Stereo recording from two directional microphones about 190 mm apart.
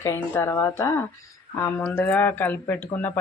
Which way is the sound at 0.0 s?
15° left (ahead or behind).